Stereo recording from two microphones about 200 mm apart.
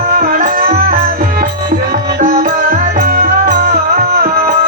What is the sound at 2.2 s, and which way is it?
Music, 45° right (ahead or behind).